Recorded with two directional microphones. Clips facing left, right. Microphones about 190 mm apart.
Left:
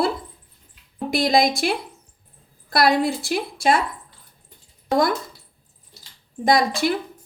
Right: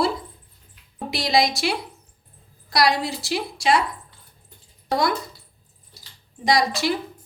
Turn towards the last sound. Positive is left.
turn(degrees=55)  # may be behind; listen again after turning